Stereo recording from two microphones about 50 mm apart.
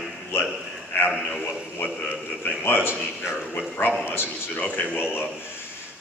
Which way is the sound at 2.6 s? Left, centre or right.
Left.